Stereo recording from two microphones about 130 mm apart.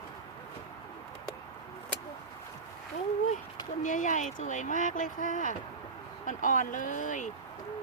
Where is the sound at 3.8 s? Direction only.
75° left (ahead or behind).